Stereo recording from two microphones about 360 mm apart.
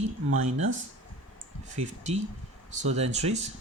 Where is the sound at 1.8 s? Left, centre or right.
Centre.